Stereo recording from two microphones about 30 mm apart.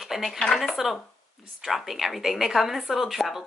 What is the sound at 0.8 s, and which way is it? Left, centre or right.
Speech, centre.